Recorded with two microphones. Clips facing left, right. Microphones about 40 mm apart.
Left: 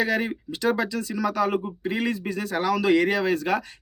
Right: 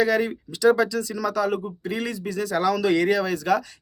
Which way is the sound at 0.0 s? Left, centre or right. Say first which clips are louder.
Right 3 dB; centre.